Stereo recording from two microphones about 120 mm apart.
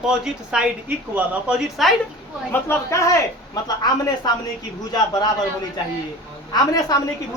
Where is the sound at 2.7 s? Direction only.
25° left (ahead or behind).